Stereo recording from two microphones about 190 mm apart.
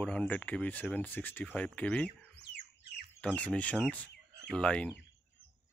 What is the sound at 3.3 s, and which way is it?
Speech, 10° left (ahead or behind).